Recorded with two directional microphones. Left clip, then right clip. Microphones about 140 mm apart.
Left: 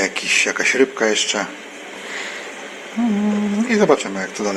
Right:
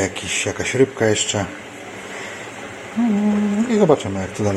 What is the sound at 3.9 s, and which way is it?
Speech, 15° right (ahead or behind).